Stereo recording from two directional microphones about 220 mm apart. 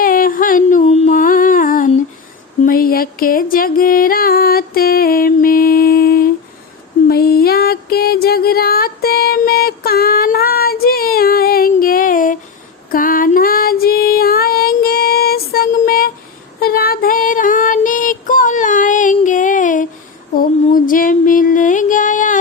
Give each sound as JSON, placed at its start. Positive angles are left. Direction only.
{"t": 0.0, "sound": "a sound", "side_deg": 40}
{"t": 7.1, "sound": "music", "side_deg": 45}
{"t": 16.6, "sound": "female singing", "side_deg": 45}
{"t": 20.3, "sound": "music", "side_deg": 40}